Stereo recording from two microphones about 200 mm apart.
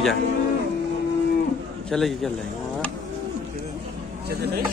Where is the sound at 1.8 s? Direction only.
Centre (ahead or behind).